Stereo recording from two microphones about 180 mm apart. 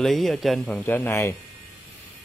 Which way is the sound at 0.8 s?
10° left (ahead or behind).